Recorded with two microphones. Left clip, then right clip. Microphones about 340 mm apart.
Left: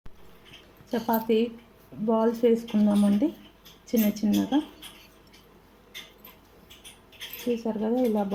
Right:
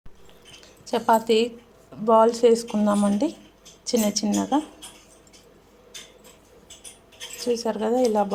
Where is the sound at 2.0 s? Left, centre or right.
Right.